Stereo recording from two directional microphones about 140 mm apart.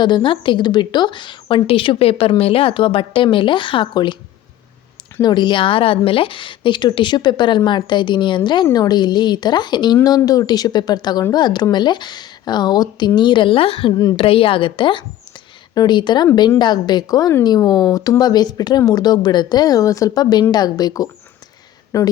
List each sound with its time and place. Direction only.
0.0 s a woman's voice: 35° left (ahead or behind)
5.2 s a woman's voice: 30° left (ahead or behind)